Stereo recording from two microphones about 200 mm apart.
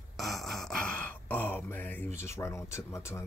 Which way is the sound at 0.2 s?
Centre (ahead or behind).